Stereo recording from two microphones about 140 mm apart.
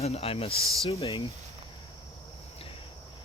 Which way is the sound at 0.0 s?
45° left (ahead or behind).